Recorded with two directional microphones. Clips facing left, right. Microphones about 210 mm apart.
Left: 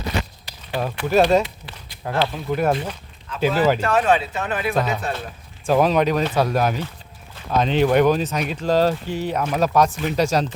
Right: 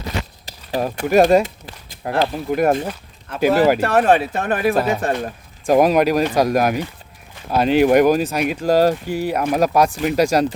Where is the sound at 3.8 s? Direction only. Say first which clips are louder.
Right 3 dB; 60° right (ahead or behind).